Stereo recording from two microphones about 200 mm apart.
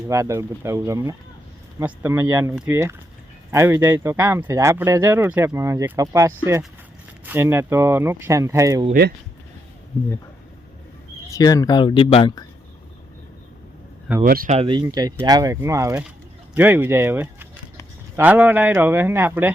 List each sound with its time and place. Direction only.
0.1 s speech: 15° right (ahead or behind)
8.9 s speech: 55° right (ahead or behind)
11.3 s speech: 15° left (ahead or behind)
14.3 s speech: 45° right (ahead or behind)
14.5 s speech: 25° right (ahead or behind); by 19.5 s 10° right (ahead or behind)